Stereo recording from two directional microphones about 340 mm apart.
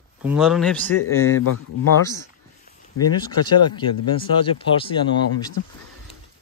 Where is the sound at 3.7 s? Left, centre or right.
Centre.